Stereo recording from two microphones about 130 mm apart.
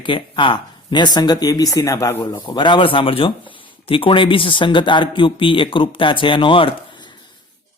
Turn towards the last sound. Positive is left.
turn(degrees=40)  # may be behind; listen again after turning